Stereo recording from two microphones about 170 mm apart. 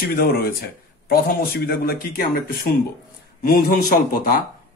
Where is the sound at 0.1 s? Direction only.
60° left (ahead or behind).